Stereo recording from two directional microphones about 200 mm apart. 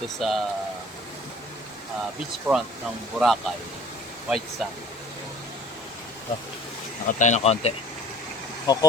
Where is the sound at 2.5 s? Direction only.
5° right (ahead or behind).